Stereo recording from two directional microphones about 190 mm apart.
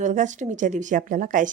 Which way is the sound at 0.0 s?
40° right (ahead or behind).